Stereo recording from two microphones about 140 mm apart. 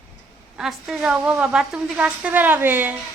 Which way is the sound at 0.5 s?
5° right (ahead or behind).